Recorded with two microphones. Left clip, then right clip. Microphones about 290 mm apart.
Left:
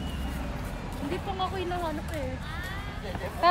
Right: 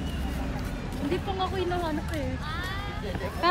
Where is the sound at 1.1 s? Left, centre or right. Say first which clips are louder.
Right 2 dB; centre.